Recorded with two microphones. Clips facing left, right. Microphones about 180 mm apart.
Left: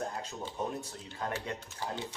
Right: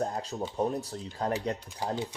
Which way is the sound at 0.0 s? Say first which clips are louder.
Right 6 dB; 35° right (ahead or behind).